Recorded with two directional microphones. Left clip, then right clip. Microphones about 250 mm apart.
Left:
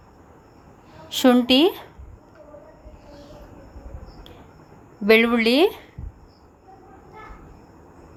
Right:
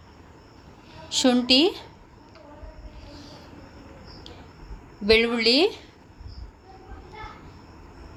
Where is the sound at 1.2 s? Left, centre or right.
Centre.